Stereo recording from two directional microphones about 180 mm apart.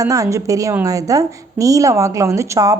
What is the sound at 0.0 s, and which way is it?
A woman's voice, 20° right (ahead or behind).